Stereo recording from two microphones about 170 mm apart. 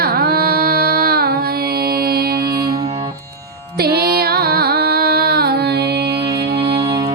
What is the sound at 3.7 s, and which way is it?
Music, 65° right (ahead or behind).